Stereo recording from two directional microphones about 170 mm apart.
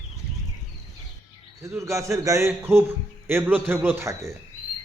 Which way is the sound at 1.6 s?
15° right (ahead or behind).